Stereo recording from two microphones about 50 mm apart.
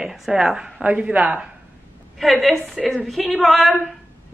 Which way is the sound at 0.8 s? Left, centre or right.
Right.